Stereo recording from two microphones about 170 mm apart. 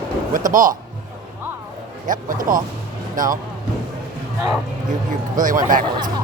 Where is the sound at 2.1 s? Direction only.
50° right (ahead or behind).